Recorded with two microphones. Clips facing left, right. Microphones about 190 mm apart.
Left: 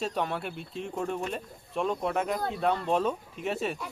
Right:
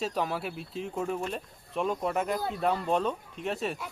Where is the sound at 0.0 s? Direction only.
Centre (ahead or behind).